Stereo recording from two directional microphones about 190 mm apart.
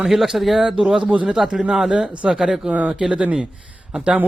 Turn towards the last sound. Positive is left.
turn(degrees=-5)  # may be behind; listen again after turning